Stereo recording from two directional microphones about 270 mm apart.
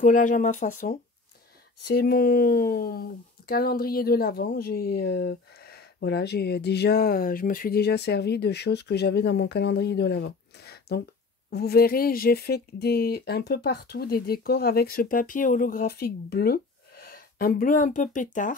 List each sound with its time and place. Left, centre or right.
0.0 s speech: left